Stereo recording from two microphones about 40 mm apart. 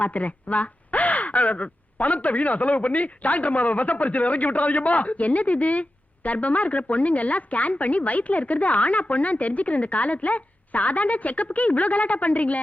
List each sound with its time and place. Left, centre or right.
0.0 s a woman's voice: left